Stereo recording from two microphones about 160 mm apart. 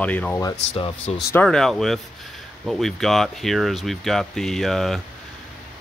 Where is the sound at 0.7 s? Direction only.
35° left (ahead or behind).